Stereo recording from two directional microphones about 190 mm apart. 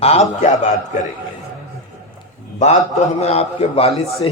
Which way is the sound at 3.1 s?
35° left (ahead or behind).